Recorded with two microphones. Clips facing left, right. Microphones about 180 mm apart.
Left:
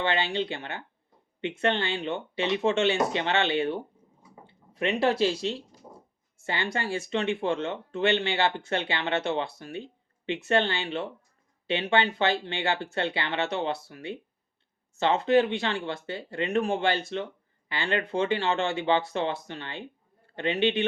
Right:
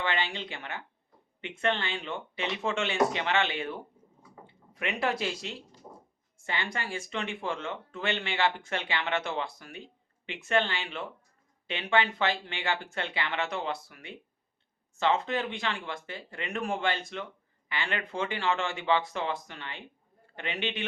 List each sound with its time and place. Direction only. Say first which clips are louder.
0.0 s a woman's voice: left 5 dB; 30° left (ahead or behind)